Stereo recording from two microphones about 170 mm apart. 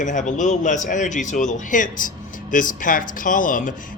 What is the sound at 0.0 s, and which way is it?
A man's voice, 50° left (ahead or behind).